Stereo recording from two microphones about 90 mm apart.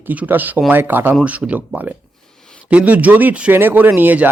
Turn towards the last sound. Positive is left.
turn(degrees=-20)  # may be behind; listen again after turning